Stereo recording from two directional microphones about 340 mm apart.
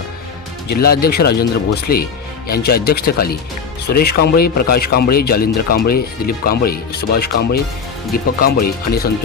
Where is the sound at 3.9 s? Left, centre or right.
Left.